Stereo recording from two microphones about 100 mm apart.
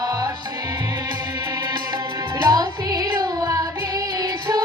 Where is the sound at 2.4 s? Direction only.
40° right (ahead or behind).